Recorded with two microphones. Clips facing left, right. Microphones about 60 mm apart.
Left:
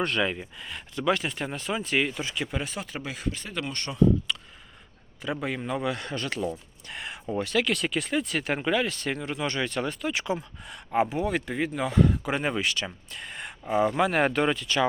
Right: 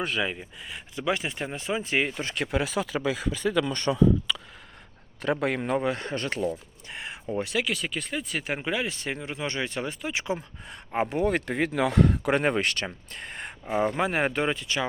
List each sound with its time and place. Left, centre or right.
0.0 s speech: centre; by 2.2 s right
2.2 s a man's voice: right
3.4 s speech: right
3.9 s speech: right
5.2 s a man's voice: right
5.7 s speech: right
6.8 s a sound: right
7.3 s speech: right
7.6 s speech: centre; by 11.0 s right
11.1 s speech: right
13.7 s speech: right